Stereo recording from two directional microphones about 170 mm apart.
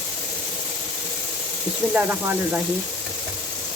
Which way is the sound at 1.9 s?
5° right (ahead or behind).